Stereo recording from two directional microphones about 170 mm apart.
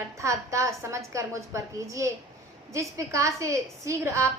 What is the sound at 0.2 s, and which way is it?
A woman's voice, 20° right (ahead or behind).